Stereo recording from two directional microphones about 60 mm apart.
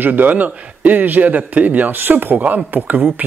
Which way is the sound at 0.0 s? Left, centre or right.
Right.